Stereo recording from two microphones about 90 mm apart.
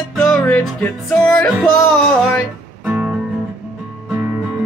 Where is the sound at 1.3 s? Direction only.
5° left (ahead or behind).